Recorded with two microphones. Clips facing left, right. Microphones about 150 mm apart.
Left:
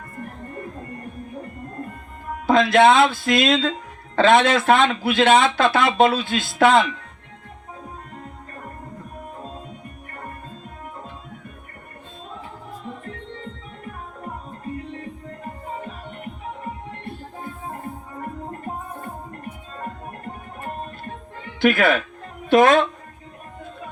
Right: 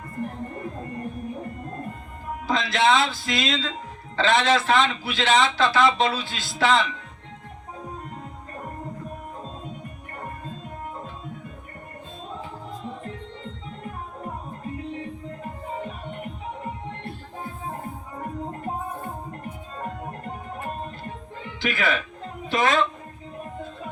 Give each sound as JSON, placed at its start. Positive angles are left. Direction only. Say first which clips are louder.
{"t": 2.5, "sound": "speech", "louder": "left 7 dB", "side_deg": 55}
{"t": 21.6, "sound": "a woman's voice", "louder": "left 8 dB", "side_deg": 55}